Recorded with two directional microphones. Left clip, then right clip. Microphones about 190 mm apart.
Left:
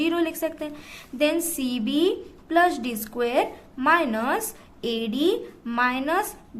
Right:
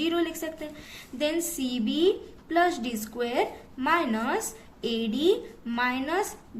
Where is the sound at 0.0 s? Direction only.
30° left (ahead or behind).